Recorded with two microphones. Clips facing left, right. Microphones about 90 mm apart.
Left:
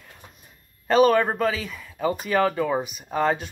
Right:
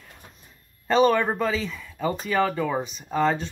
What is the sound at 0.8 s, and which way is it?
Speech, 10° left (ahead or behind).